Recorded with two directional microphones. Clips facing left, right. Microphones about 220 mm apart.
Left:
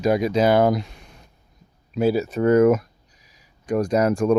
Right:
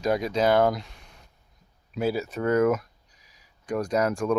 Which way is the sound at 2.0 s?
25° left (ahead or behind).